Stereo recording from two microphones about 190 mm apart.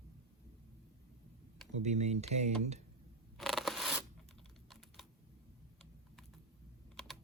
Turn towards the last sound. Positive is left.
turn(degrees=0)  # may be behind; listen again after turning